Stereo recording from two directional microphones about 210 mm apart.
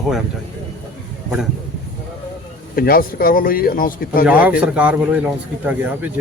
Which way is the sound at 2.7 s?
45° left (ahead or behind).